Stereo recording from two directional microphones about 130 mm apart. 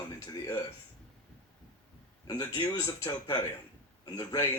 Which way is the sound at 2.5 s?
40° left (ahead or behind).